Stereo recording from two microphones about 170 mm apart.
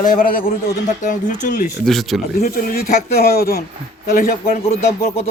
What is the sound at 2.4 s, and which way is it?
Speech, 60° left (ahead or behind).